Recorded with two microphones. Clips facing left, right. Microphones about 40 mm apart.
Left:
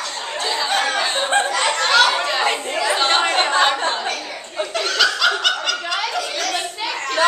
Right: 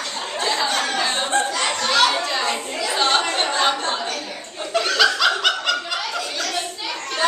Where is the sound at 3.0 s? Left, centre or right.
Centre.